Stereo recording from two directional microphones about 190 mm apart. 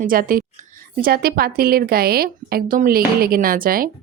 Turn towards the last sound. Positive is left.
turn(degrees=-50)  # may be behind; listen again after turning